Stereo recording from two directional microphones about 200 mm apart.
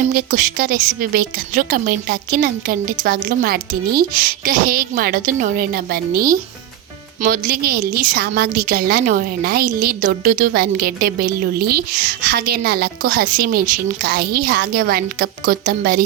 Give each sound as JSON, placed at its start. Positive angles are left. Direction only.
{"t": 0.1, "sound": "a woman's voice", "side_deg": -45}